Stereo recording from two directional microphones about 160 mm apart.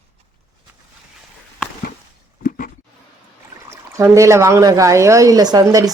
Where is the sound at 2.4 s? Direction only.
60° left (ahead or behind).